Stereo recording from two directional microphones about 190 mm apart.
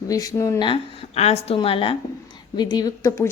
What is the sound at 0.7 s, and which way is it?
A woman's voice, 35° left (ahead or behind).